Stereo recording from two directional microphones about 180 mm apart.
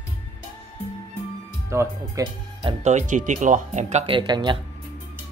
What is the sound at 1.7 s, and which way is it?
Speech, 15° right (ahead or behind).